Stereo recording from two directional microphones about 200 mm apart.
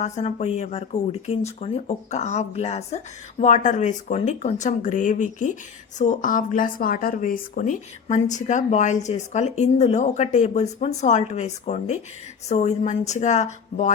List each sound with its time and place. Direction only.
0.0 s speech: 35° left (ahead or behind)